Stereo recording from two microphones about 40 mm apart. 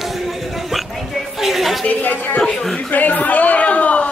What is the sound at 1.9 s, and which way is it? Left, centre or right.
Speech, left.